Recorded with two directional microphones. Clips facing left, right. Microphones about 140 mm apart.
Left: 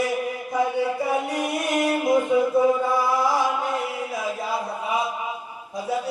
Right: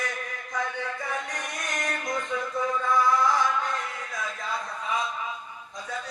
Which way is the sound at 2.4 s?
25° left (ahead or behind).